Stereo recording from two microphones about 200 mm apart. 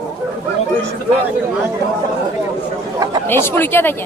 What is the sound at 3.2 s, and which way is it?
Speech, 10° left (ahead or behind).